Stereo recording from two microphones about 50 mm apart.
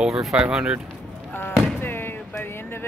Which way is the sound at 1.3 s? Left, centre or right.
Left.